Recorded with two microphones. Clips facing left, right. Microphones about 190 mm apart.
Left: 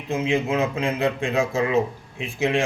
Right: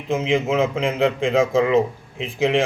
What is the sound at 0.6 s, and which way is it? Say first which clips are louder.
Speech: right 3 dB; 90° right.